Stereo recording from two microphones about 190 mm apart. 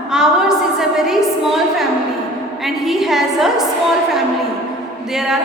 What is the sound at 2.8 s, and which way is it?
Speech, centre (ahead or behind).